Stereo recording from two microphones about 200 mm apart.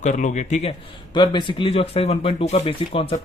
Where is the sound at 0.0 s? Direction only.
40° left (ahead or behind).